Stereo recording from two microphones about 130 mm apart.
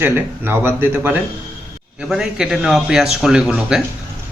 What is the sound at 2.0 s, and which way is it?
Speech, 5° right (ahead or behind).